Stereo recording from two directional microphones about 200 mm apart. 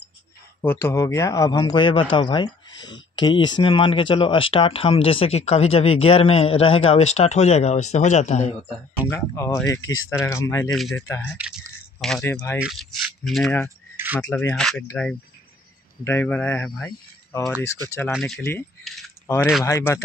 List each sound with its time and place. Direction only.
0.6 s speech: 10° left (ahead or behind); by 8.5 s 35° left (ahead or behind)
9.0 s speech: 15° left (ahead or behind)
10.7 s speech: centre (ahead or behind)
11.1 s speech: 10° left (ahead or behind)
12.5 s speech: centre (ahead or behind)
13.9 s a sound: 10° right (ahead or behind)
14.5 s speech: centre (ahead or behind)